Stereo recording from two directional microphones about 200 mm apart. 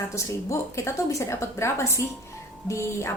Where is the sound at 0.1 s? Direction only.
15° left (ahead or behind).